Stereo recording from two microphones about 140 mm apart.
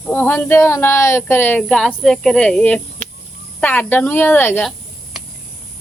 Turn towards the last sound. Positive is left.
turn(degrees=15)  # may be behind; listen again after turning